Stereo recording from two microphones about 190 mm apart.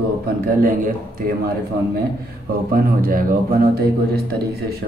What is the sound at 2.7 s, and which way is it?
Speech, 50° right (ahead or behind).